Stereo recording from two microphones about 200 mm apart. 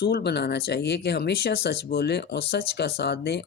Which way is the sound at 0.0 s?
55° left (ahead or behind).